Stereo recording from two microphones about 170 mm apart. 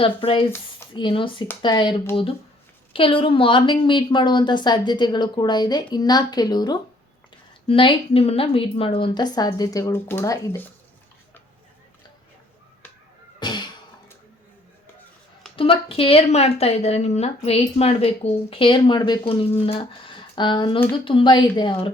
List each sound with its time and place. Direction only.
0.0 s a woman's voice: 30° left (ahead or behind); by 10.7 s 15° left (ahead or behind)
13.4 s music: 25° left (ahead or behind)
15.5 s a woman's voice: 35° left (ahead or behind)